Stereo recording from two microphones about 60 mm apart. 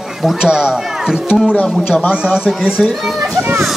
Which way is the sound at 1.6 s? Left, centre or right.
Centre.